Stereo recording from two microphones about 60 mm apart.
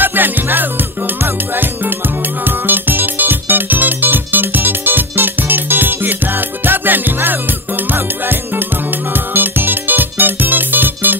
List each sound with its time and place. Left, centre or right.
0.0 s music: right
2.6 s music: right
9.3 s music: right